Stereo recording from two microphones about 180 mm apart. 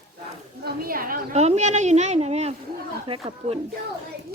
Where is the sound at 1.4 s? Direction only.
40° right (ahead or behind).